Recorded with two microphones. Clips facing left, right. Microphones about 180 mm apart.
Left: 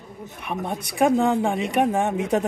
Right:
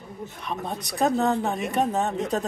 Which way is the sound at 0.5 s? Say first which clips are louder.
Left 4 dB; 15° left (ahead or behind).